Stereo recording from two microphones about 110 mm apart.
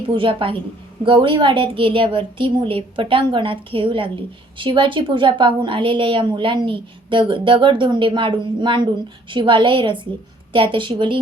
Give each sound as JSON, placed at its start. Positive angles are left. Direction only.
{"t": 0.2, "sound": "a woman's voice", "side_deg": -55}